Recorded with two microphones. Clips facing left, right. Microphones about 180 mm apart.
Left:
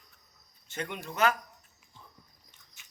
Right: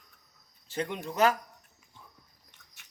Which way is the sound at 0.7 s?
30° right (ahead or behind).